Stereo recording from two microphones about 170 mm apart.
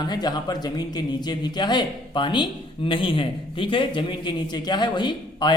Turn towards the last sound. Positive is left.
turn(degrees=25)  # may be behind; listen again after turning